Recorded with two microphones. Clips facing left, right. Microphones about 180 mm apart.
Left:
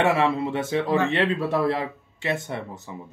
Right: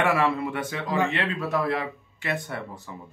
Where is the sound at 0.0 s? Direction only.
25° left (ahead or behind).